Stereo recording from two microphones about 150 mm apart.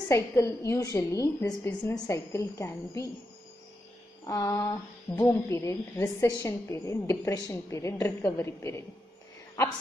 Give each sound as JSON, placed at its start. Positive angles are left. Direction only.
{"t": 0.1, "sound": "a woman's voice", "side_deg": 20}
{"t": 4.3, "sound": "a woman's voice", "side_deg": 25}